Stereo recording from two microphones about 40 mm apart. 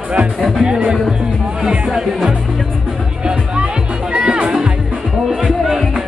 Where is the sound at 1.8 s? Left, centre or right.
Centre.